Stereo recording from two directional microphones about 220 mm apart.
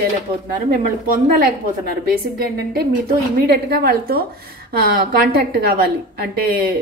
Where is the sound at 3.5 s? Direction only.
45° right (ahead or behind).